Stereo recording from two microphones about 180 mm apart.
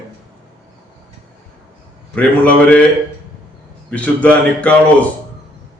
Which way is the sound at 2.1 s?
5° left (ahead or behind).